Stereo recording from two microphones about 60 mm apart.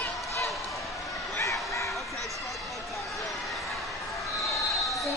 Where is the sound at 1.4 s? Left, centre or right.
Left.